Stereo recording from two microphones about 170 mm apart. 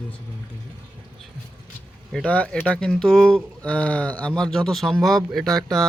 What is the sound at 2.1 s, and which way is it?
Speech, 5° left (ahead or behind).